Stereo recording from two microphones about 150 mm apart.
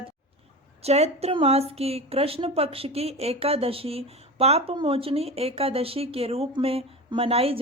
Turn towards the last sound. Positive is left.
turn(degrees=-40)  # may be behind; listen again after turning